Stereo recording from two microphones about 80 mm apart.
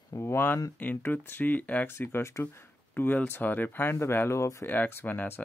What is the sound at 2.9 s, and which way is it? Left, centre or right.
Speech, left.